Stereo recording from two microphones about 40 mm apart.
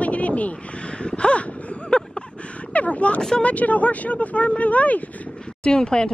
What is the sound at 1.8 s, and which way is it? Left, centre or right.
Vehicle, left.